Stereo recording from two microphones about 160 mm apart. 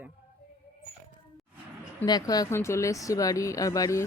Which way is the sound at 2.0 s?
25° left (ahead or behind).